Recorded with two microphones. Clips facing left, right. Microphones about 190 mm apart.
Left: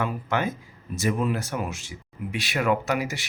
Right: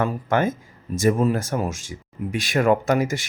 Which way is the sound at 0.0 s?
45° right (ahead or behind).